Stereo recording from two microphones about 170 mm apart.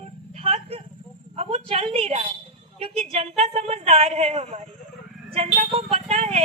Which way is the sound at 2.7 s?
35° right (ahead or behind).